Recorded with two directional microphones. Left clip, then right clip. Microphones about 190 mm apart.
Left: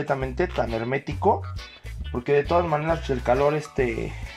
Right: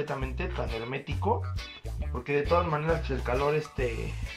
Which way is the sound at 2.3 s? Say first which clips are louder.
Left 5 dB; 35° left (ahead or behind).